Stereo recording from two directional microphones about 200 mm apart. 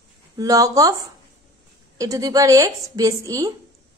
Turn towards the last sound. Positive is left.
turn(degrees=-15)  # may be behind; listen again after turning